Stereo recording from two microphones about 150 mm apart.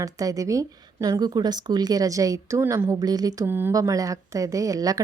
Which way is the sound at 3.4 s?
15° right (ahead or behind).